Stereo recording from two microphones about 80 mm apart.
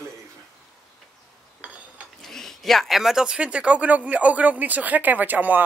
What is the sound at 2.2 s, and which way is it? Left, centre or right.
Speech, centre.